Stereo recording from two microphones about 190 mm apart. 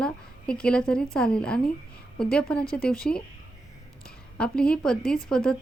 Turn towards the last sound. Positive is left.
turn(degrees=5)  # may be behind; listen again after turning